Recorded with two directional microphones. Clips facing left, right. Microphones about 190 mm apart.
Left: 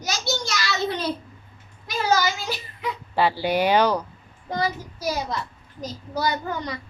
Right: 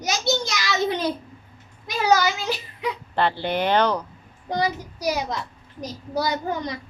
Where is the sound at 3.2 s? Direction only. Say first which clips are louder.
Left 2 dB; 10° left (ahead or behind).